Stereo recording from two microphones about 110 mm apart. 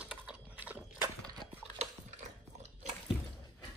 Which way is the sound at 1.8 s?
90° right.